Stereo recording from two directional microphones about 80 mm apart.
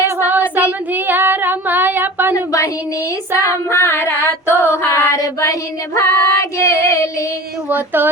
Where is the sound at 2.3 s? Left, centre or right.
Left.